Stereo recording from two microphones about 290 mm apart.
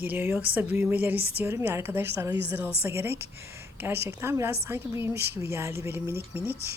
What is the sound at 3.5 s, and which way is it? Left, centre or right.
Speech, centre.